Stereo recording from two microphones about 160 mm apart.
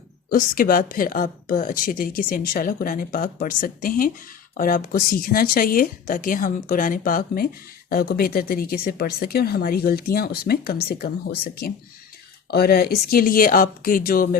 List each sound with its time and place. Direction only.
0.3 s speech: 60° left (ahead or behind)